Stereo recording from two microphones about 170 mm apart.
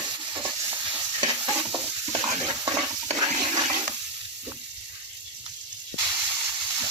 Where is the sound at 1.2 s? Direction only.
20° right (ahead or behind).